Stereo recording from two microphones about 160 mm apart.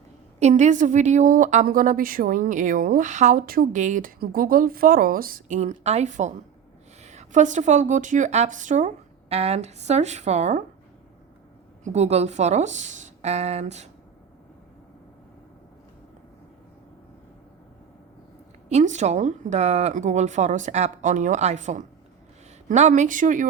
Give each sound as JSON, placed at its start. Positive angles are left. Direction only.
{"t": 0.3, "sound": "a woman's voice", "side_deg": -45}
{"t": 11.9, "sound": "speech", "side_deg": -45}
{"t": 18.7, "sound": "speech", "side_deg": -45}